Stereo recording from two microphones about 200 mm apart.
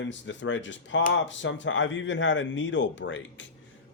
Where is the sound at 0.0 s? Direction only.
65° left (ahead or behind).